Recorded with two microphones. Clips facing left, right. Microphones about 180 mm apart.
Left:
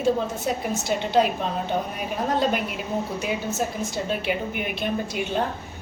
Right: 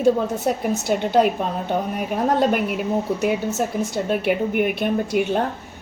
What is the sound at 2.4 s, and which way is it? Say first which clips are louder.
Speech: right 5 dB; 60° right (ahead or behind).